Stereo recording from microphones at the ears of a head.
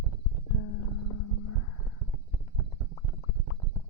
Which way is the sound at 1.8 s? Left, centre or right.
Right.